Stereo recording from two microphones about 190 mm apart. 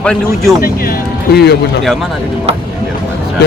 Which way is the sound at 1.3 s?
60° left (ahead or behind).